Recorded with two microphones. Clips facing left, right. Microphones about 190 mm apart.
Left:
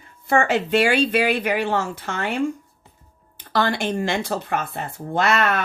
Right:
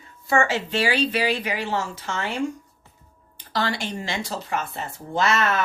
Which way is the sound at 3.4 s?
55° left (ahead or behind).